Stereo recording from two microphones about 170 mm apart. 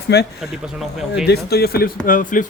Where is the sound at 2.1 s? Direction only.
50° left (ahead or behind).